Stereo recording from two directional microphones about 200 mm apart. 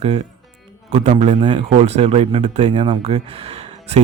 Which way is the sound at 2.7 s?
25° right (ahead or behind).